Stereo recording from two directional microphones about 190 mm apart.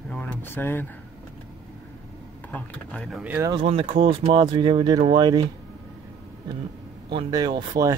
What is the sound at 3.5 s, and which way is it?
Speech, 30° right (ahead or behind).